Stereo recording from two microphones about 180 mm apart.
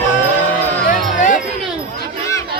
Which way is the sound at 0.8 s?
45° left (ahead or behind).